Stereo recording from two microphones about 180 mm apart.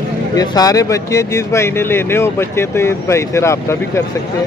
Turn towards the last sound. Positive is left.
turn(degrees=15)  # may be behind; listen again after turning